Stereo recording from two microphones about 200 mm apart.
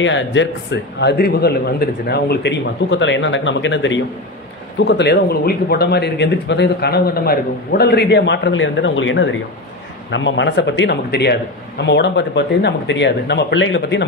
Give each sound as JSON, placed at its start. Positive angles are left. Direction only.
{"t": 0.0, "sound": "speech", "side_deg": 65}